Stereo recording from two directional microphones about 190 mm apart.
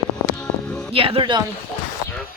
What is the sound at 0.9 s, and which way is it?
Speech, 30° right (ahead or behind).